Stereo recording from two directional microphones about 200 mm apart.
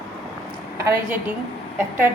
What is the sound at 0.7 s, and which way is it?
Speech, 15° right (ahead or behind).